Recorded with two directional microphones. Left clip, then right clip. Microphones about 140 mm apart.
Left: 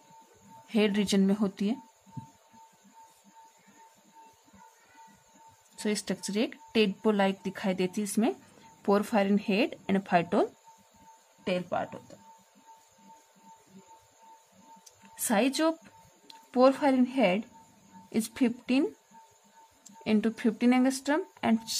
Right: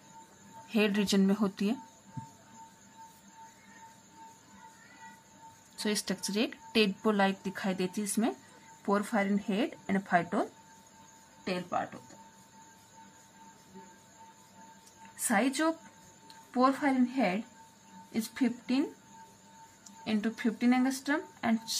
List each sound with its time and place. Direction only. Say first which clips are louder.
0.7 s speech: left 2 dB; 20° left (ahead or behind)
5.8 s speech: left 1 dB; 20° left (ahead or behind)
8.8 s speech: left 4 dB; 40° left (ahead or behind)
11.4 s speech: left 3 dB; 90° left
15.2 s a woman's voice: left 2 dB; 50° left (ahead or behind); by 18.9 s 70° left (ahead or behind)
20.1 s speech: left 5 dB; 65° left (ahead or behind)